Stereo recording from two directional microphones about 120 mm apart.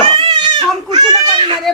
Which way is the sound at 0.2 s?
45° right (ahead or behind).